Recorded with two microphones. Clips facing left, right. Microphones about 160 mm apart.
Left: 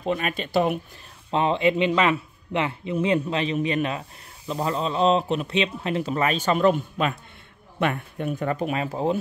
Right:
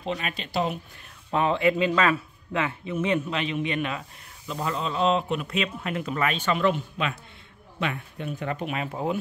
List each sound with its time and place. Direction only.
0.0 s speech: 50° left (ahead or behind)
1.3 s speech: 25° left (ahead or behind)